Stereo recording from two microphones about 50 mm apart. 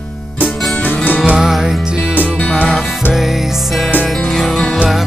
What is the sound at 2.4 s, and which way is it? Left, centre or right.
Music, left.